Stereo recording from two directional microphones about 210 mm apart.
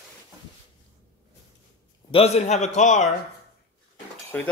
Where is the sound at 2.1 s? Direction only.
30° left (ahead or behind).